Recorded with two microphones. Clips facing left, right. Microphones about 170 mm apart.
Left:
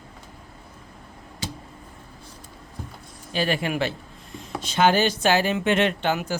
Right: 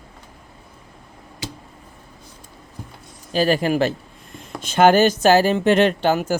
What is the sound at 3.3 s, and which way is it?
Speech, 40° right (ahead or behind).